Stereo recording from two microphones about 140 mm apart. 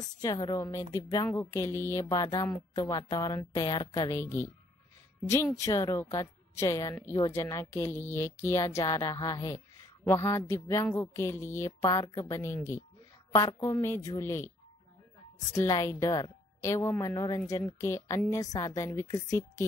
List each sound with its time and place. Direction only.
0.2 s speech: 25° left (ahead or behind)
15.5 s speech: 20° left (ahead or behind)